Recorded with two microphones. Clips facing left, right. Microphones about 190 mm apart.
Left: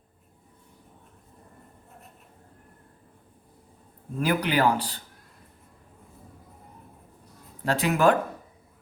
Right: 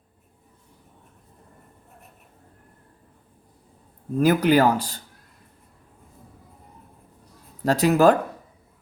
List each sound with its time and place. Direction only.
4.2 s speech: 40° right (ahead or behind)
7.6 s speech: 40° right (ahead or behind)